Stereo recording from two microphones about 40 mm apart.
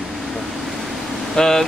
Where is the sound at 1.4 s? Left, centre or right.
Centre.